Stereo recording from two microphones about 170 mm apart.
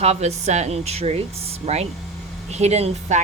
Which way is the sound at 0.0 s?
40° right (ahead or behind).